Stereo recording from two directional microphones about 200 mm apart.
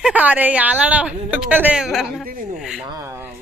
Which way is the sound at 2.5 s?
Centre (ahead or behind).